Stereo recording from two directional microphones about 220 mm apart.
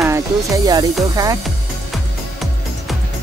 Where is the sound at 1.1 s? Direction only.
15° right (ahead or behind).